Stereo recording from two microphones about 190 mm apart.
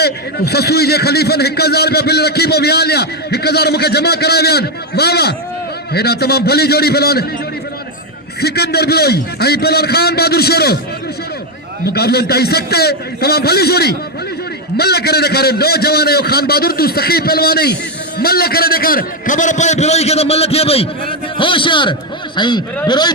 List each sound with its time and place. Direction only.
0.0 s a man's voice: 55° left (ahead or behind)
8.4 s a man's voice: 55° left (ahead or behind)
11.9 s a man's voice: 55° left (ahead or behind); by 23.1 s 25° left (ahead or behind)